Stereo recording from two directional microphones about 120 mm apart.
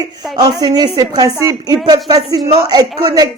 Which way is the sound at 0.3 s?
35° right (ahead or behind).